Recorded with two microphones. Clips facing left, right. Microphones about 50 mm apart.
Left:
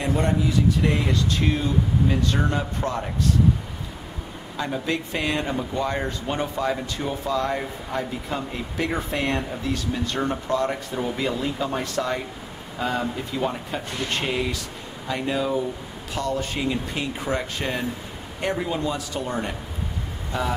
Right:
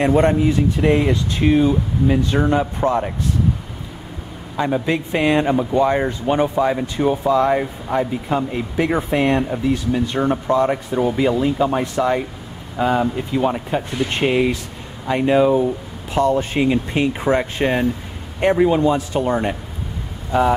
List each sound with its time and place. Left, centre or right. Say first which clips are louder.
0.0 s speech: right 8 dB; right
4.6 s speech: right 7 dB; right